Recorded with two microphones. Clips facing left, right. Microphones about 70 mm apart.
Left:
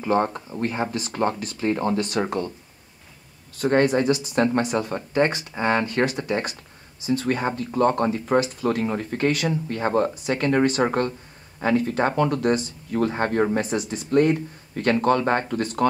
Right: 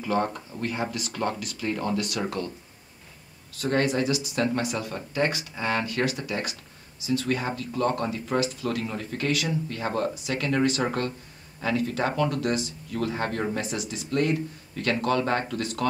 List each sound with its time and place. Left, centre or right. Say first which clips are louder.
0.0 s speech: left 4 dB; left
3.5 s speech: left 5 dB; left